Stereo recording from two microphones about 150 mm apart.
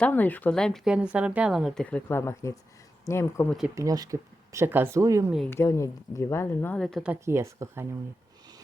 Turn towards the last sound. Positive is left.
turn(degrees=-20)  # may be behind; listen again after turning